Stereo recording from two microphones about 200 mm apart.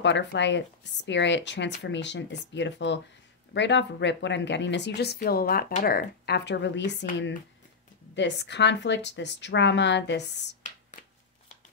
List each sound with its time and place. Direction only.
0.0 s speech: 60° left (ahead or behind)
8.1 s speech: 60° left (ahead or behind)
10.6 s a sound: 35° left (ahead or behind)